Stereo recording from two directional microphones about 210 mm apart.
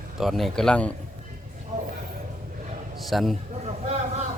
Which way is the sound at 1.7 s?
35° right (ahead or behind).